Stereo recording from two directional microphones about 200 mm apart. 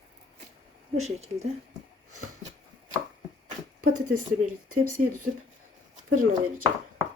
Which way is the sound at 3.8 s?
45° right (ahead or behind).